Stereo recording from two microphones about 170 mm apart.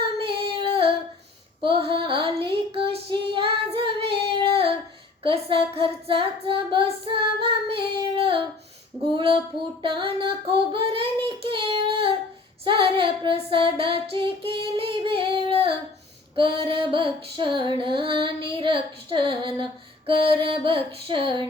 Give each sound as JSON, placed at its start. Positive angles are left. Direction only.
{"t": 0.0, "sound": "female singing", "side_deg": -30}
{"t": 1.6, "sound": "child singing", "side_deg": -30}
{"t": 9.8, "sound": "music", "side_deg": -30}
{"t": 11.4, "sound": "child singing", "side_deg": -30}
{"t": 16.3, "sound": "music", "side_deg": -30}
{"t": 17.3, "sound": "child singing", "side_deg": -30}
{"t": 20.1, "sound": "music", "side_deg": -30}